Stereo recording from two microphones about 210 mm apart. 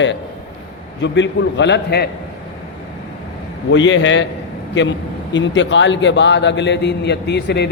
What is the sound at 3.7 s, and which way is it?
Speech, 60° left (ahead or behind).